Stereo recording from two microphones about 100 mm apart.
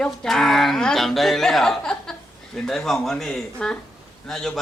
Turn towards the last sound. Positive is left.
turn(degrees=5)  # may be behind; listen again after turning